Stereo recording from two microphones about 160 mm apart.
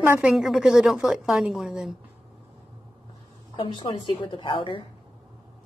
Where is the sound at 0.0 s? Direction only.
15° right (ahead or behind).